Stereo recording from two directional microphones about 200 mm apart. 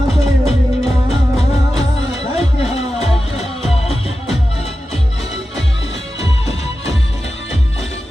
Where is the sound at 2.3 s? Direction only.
30° left (ahead or behind).